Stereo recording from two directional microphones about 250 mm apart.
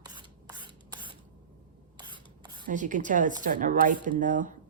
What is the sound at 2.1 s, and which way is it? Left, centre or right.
Rub, centre.